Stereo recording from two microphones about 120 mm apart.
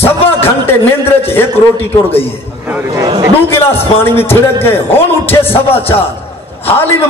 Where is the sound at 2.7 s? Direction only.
20° right (ahead or behind).